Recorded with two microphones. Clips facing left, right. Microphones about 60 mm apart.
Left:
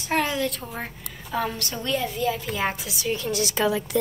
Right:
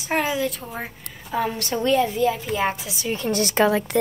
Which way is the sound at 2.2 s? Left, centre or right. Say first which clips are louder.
Right 3 dB; centre.